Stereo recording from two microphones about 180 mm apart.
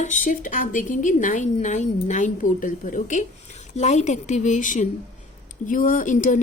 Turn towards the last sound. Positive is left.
turn(degrees=45)  # may be behind; listen again after turning